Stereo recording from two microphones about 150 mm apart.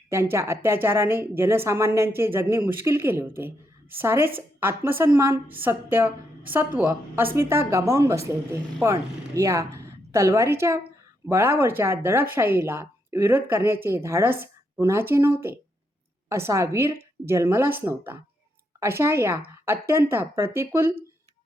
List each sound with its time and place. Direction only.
0.1 s a woman's voice: 20° right (ahead or behind)